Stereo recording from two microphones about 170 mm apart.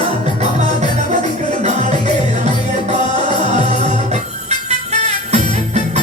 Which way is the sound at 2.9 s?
40° right (ahead or behind).